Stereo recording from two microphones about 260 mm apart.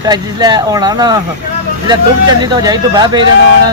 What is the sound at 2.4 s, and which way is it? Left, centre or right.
Speech, centre.